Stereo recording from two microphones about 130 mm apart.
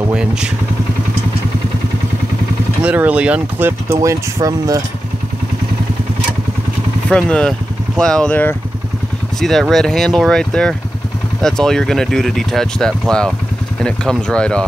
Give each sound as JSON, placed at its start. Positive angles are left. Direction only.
{"t": 0.1, "sound": "speech", "side_deg": -5}
{"t": 2.8, "sound": "speech", "side_deg": -10}
{"t": 7.1, "sound": "speech", "side_deg": 5}